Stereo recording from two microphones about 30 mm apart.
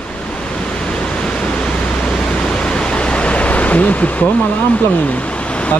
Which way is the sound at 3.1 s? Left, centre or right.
Left.